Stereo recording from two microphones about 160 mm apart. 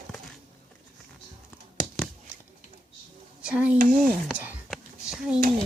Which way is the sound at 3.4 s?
5° right (ahead or behind).